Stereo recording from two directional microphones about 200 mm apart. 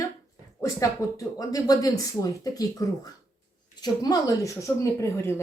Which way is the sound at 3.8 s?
20° left (ahead or behind).